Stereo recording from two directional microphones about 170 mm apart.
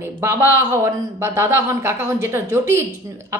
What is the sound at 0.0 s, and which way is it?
Speech, 15° right (ahead or behind).